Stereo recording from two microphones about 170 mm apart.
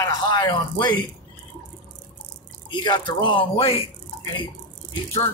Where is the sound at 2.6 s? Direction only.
25° left (ahead or behind).